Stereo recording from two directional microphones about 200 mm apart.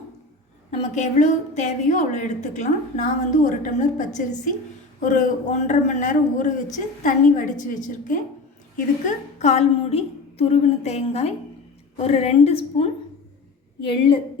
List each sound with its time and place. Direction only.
0.7 s a woman's voice: 35° left (ahead or behind)